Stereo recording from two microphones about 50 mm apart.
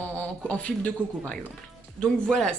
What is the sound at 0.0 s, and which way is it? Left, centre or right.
Speech, left.